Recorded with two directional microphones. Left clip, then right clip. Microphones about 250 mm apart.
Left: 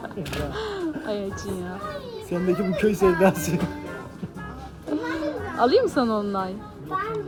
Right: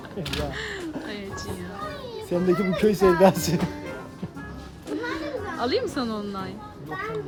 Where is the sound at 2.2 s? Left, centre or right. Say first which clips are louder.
Right 2 dB; right.